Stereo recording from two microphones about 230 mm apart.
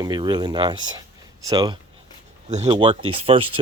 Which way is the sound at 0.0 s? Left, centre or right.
Centre.